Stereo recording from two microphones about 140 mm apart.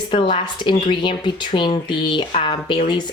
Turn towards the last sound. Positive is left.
turn(degrees=35)  # may be behind; listen again after turning